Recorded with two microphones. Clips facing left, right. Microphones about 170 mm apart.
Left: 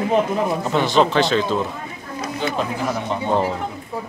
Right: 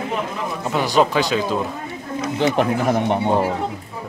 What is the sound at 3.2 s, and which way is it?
Speech, 15° right (ahead or behind).